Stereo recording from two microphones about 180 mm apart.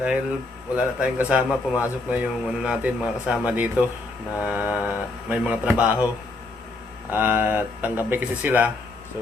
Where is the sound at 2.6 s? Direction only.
5° right (ahead or behind).